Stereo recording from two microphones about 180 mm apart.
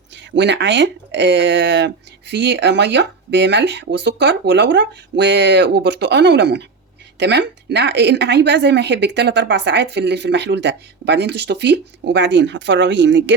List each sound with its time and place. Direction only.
0.3 s speech: 75° right (ahead or behind)